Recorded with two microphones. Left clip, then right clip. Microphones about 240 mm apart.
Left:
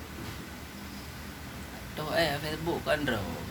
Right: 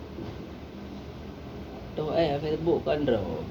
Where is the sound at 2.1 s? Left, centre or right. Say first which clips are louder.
Right 2 dB; centre.